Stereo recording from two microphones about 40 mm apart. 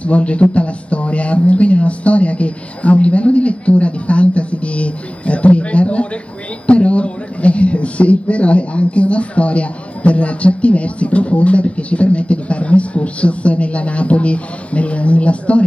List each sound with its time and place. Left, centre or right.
0.0 s a man's voice: left